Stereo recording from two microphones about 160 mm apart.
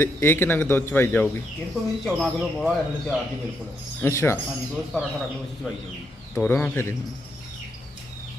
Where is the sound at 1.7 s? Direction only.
Centre (ahead or behind).